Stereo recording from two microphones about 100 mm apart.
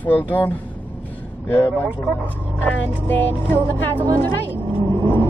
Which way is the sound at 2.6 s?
15° left (ahead or behind).